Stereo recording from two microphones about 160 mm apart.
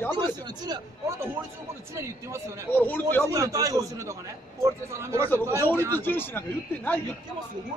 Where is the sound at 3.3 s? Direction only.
20° right (ahead or behind).